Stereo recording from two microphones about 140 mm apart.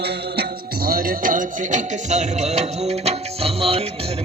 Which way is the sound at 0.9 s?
90° right.